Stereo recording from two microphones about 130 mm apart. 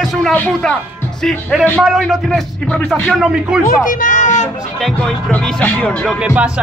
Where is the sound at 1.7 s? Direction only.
5° right (ahead or behind).